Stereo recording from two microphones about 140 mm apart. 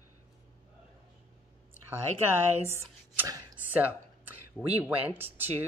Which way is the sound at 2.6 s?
15° right (ahead or behind).